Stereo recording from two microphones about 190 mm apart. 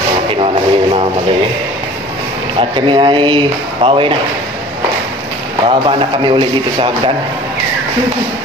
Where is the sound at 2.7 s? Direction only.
25° right (ahead or behind).